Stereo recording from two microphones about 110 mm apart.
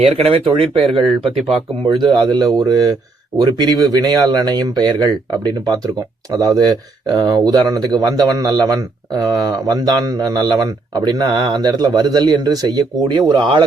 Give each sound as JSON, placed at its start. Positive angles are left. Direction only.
{"t": 0.1, "sound": "speech", "side_deg": -60}
{"t": 0.8, "sound": "speech", "side_deg": 0}
{"t": 1.8, "sound": "speech", "side_deg": -45}
{"t": 6.3, "sound": "speech", "side_deg": -35}